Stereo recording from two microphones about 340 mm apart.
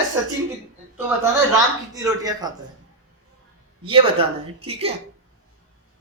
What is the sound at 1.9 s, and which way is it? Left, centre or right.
Speech, centre.